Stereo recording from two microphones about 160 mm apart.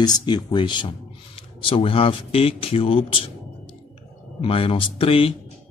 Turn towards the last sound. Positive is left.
turn(degrees=35)  # may be behind; listen again after turning